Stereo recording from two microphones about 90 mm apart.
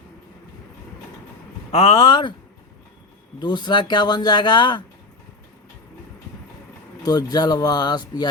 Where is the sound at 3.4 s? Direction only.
55° left (ahead or behind).